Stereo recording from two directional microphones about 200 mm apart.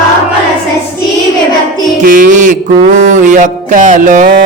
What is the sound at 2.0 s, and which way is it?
Mantra, 45° right (ahead or behind).